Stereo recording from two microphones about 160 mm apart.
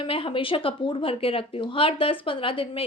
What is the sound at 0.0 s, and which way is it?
A woman's voice, 35° left (ahead or behind).